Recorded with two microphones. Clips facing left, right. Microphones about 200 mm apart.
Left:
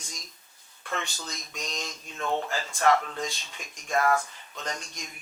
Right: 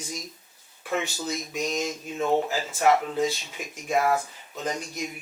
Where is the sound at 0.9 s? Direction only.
10° right (ahead or behind).